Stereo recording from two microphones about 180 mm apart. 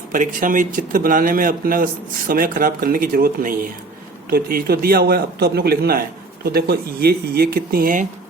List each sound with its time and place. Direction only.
0.1 s a man's voice: 45° right (ahead or behind)